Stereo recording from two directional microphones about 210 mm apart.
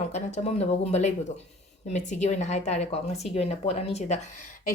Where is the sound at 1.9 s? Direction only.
35° left (ahead or behind).